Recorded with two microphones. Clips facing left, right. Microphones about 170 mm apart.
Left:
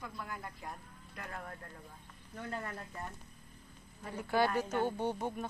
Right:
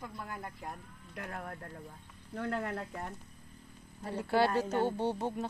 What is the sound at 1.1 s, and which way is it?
Speech, 50° right (ahead or behind).